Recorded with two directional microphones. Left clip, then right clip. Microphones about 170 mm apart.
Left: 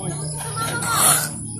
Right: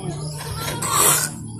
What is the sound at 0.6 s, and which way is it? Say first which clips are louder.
Music: even; 20° right (ahead or behind).